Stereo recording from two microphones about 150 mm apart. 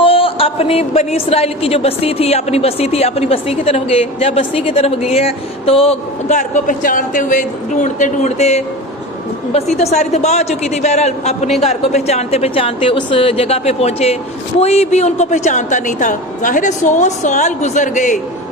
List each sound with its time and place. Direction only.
0.0 s a woman's voice: 40° left (ahead or behind); by 18.2 s 55° left (ahead or behind)